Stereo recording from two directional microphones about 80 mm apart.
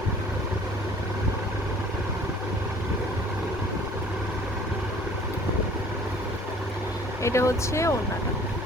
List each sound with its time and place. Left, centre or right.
7.2 s speech: left